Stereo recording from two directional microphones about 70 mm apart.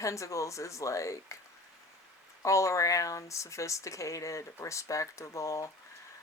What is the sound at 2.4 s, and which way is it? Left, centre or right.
Speech, left.